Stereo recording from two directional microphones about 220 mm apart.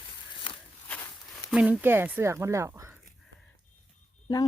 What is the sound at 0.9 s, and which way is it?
Walk, 10° left (ahead or behind).